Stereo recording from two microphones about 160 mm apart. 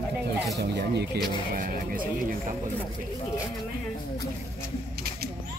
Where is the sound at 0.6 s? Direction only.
90° right.